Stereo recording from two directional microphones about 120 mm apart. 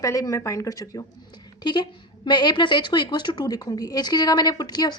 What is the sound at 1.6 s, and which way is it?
A woman's voice, 40° left (ahead or behind).